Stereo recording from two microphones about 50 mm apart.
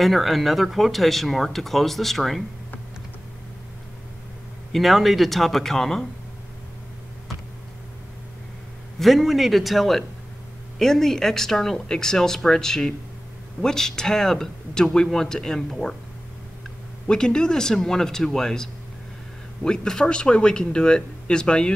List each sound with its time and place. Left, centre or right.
0.0 s speech: centre
4.7 s speech: centre
9.0 s speech: centre
17.1 s speech: centre